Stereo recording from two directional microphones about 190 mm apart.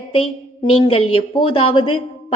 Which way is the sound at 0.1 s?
30° left (ahead or behind).